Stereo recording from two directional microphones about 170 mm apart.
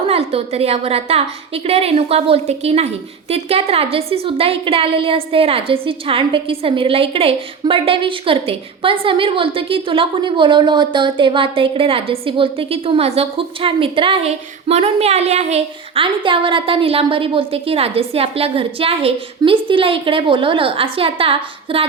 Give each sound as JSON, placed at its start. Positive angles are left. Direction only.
{"t": 0.1, "sound": "a woman's voice", "side_deg": -35}